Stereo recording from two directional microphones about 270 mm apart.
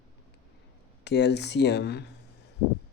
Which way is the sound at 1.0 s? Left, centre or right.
Left.